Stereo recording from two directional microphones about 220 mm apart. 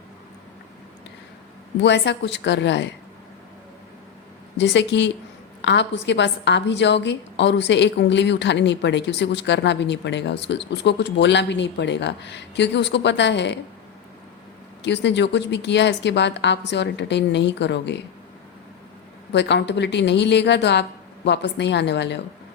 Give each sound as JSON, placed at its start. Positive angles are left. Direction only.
{"t": 1.8, "sound": "a woman's voice", "side_deg": 50}
{"t": 4.5, "sound": "a woman's voice", "side_deg": 55}
{"t": 14.8, "sound": "a woman's voice", "side_deg": 50}
{"t": 19.3, "sound": "a woman's voice", "side_deg": 50}